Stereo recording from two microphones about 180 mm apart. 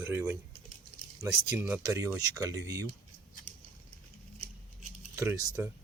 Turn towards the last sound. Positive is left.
turn(degrees=-20)  # may be behind; listen again after turning